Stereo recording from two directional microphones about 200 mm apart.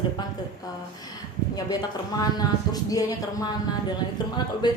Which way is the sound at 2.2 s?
20° left (ahead or behind).